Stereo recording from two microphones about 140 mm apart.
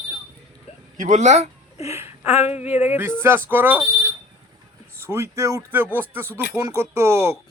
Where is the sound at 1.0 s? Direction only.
60° right (ahead or behind).